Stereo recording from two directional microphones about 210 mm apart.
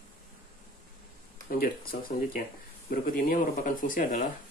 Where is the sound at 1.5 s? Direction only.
45° left (ahead or behind).